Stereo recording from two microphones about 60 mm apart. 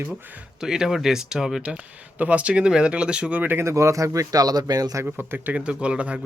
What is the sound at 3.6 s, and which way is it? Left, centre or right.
Speech, right.